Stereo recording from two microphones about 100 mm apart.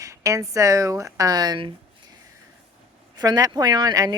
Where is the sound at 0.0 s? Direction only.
30° right (ahead or behind).